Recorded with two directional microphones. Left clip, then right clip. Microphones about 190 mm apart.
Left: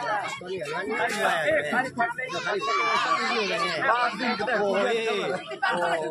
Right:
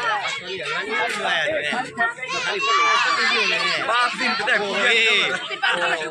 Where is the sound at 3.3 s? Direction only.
75° left (ahead or behind).